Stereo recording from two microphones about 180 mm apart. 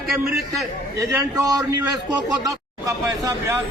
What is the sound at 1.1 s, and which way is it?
A man's voice, 20° right (ahead or behind).